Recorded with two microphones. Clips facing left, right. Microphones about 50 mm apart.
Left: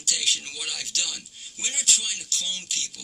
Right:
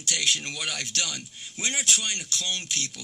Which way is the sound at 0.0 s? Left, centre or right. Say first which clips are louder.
Right 2 dB; right.